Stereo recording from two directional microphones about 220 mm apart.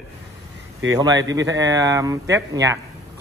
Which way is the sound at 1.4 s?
15° right (ahead or behind).